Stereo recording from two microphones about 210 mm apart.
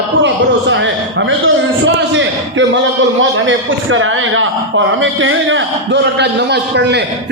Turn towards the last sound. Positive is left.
turn(degrees=-55)  # may be behind; listen again after turning